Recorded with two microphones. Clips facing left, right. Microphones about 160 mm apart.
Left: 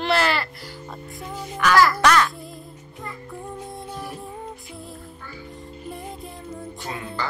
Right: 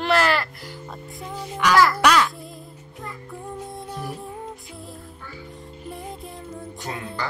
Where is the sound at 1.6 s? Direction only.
15° right (ahead or behind).